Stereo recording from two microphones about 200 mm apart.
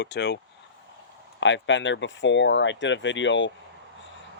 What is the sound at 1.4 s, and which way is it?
Speech, 65° left (ahead or behind).